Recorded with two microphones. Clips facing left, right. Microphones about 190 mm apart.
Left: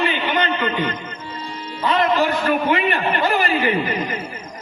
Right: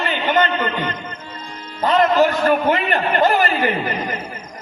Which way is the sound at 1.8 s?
45° right (ahead or behind).